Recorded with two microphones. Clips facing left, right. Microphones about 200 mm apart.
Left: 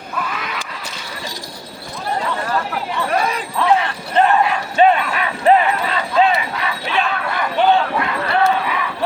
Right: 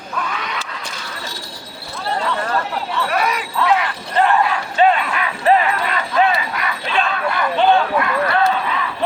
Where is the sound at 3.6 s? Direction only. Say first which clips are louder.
Left 2 dB; 25° left (ahead or behind).